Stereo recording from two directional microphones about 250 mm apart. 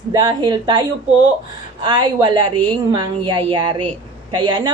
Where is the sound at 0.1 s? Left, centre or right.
Centre.